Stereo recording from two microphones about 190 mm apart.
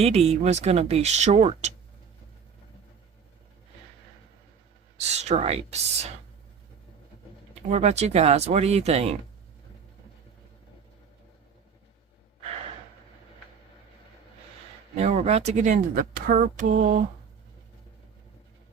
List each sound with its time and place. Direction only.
0.0 s speech: 35° right (ahead or behind)
4.9 s speech: 35° right (ahead or behind)
7.7 s speech: 35° right (ahead or behind)
14.9 s speech: 35° right (ahead or behind)